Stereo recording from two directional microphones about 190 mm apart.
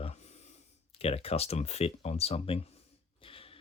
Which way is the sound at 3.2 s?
30° left (ahead or behind).